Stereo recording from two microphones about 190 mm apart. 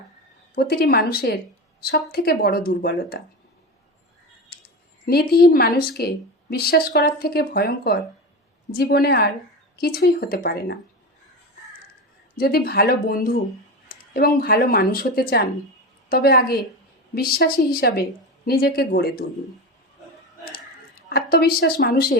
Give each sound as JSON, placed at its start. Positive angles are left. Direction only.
{"t": 0.5, "sound": "a woman's voice", "side_deg": 55}
{"t": 5.0, "sound": "a woman's voice", "side_deg": 55}
{"t": 12.4, "sound": "a woman's voice", "side_deg": 55}
{"t": 21.1, "sound": "a woman's voice", "side_deg": 55}